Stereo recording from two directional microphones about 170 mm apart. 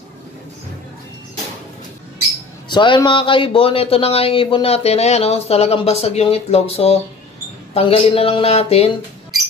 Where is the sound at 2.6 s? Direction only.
25° left (ahead or behind).